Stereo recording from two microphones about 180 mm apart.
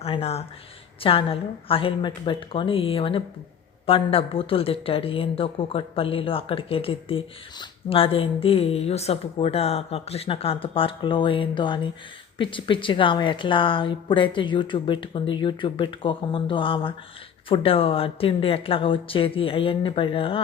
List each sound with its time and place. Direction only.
0.0 s a woman's voice: 35° left (ahead or behind)